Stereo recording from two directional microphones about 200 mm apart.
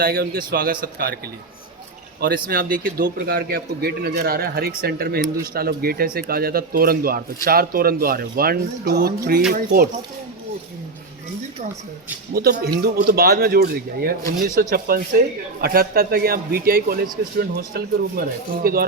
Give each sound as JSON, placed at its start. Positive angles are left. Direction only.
{"t": 0.0, "sound": "speech", "side_deg": -50}
{"t": 2.2, "sound": "speech", "side_deg": -50}
{"t": 12.3, "sound": "speech", "side_deg": -50}